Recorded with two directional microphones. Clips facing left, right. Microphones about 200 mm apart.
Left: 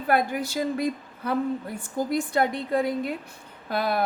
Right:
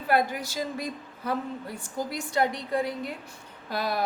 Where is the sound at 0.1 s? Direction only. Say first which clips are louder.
Left 2 dB; 55° left (ahead or behind).